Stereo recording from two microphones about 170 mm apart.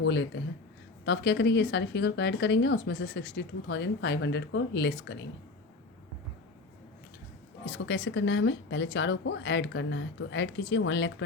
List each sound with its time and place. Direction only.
0.0 s speech: 90° left
7.7 s speech: 90° left